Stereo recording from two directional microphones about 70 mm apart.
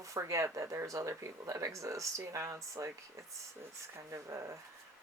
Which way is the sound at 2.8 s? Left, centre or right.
Right.